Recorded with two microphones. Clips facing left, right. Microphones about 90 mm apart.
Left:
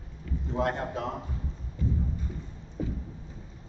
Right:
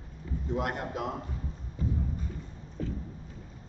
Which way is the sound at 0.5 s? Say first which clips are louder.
Left 3 dB; 30° left (ahead or behind).